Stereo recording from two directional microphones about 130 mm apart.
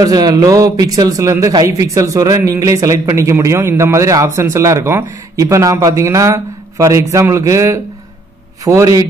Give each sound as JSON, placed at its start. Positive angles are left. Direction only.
{"t": 0.0, "sound": "speech", "side_deg": -30}